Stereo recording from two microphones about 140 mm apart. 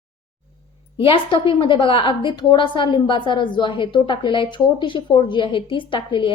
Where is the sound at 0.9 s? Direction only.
40° left (ahead or behind).